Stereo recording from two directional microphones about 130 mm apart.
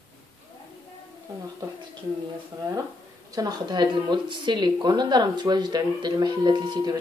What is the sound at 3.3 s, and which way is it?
Speech, 30° right (ahead or behind).